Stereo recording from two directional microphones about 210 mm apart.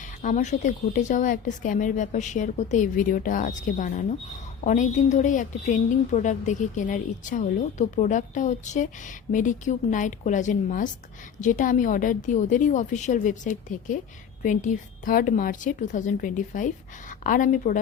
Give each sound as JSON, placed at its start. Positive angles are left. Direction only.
{"t": 0.2, "sound": "a woman's voice", "side_deg": 35}